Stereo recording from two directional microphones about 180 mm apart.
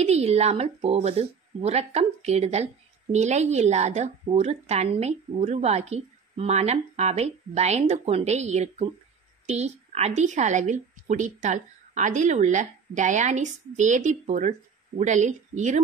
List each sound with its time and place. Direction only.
0.0 s speech: 35° right (ahead or behind)